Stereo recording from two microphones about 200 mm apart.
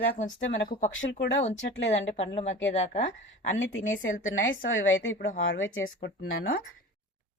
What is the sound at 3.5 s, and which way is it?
A woman's voice, 75° left (ahead or behind).